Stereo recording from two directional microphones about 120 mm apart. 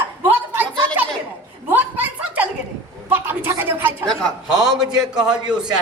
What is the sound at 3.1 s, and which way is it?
Speech, 20° right (ahead or behind).